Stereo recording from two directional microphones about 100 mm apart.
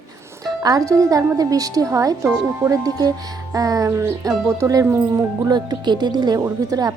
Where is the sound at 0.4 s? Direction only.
40° right (ahead or behind).